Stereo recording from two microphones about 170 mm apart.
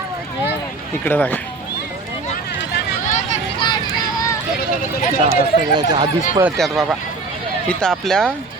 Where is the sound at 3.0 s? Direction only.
45° left (ahead or behind).